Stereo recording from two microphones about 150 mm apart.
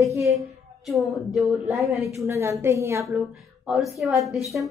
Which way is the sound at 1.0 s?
Centre (ahead or behind).